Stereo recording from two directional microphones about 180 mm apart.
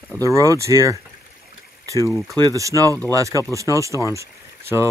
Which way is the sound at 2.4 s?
20° right (ahead or behind).